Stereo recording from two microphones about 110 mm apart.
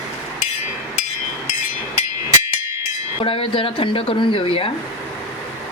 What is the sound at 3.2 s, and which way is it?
Speech, 55° left (ahead or behind).